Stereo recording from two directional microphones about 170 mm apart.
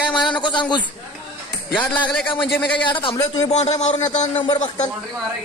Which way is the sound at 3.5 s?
40° left (ahead or behind).